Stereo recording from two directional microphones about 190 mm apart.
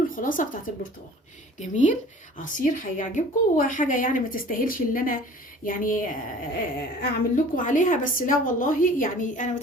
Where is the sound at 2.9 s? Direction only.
40° left (ahead or behind).